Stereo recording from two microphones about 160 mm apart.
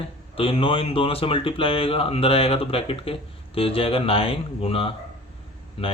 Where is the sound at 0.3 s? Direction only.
35° left (ahead or behind).